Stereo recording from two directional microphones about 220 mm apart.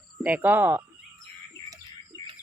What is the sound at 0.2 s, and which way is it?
Speech, 5° right (ahead or behind).